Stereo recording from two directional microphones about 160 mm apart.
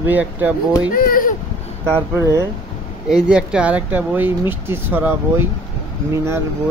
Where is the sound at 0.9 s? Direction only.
60° left (ahead or behind).